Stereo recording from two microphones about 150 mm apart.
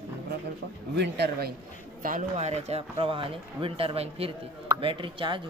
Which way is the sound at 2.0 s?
55° right (ahead or behind).